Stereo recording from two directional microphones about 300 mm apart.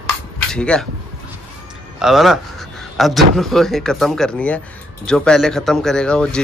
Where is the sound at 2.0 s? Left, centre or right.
Centre.